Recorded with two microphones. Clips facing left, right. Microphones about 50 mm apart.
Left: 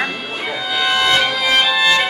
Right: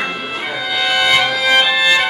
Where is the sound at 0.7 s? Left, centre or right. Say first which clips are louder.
Right 1 dB; centre.